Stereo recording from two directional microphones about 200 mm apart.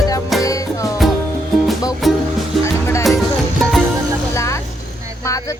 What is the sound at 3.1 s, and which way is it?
Music, centre (ahead or behind).